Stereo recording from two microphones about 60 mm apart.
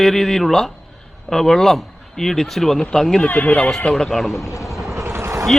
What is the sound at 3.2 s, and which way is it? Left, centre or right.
Speech, left.